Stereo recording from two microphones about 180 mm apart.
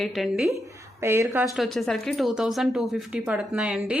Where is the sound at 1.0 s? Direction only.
15° right (ahead or behind).